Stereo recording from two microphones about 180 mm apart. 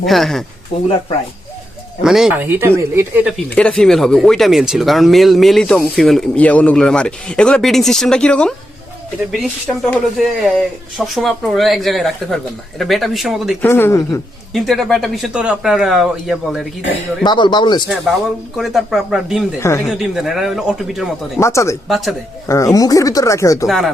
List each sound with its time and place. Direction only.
0.0 s speech: centre (ahead or behind)
0.7 s speech: 30° left (ahead or behind)
2.0 s speech: centre (ahead or behind)
3.3 s speech: 5° left (ahead or behind)
13.6 s speech: 10° left (ahead or behind)
14.5 s speech: centre (ahead or behind)
17.2 s speech: 25° left (ahead or behind)
18.5 s speech: centre (ahead or behind)
19.5 s speech: 15° left (ahead or behind)
19.9 s speech: centre (ahead or behind)
21.3 s speech: 15° left (ahead or behind)
21.8 s speech: centre (ahead or behind)
22.4 s speech: 15° left (ahead or behind)
23.6 s speech: centre (ahead or behind)